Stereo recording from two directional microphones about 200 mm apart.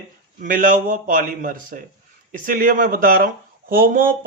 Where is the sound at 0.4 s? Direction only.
45° right (ahead or behind).